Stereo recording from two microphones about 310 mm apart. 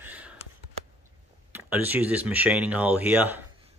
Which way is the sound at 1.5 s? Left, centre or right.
Centre.